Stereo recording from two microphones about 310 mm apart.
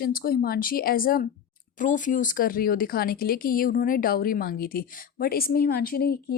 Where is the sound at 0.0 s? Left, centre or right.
Left.